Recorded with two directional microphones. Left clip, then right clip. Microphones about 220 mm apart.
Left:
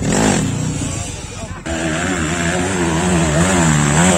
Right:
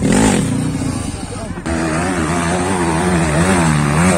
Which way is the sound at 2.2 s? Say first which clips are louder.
Right 1 dB; 10° left (ahead or behind).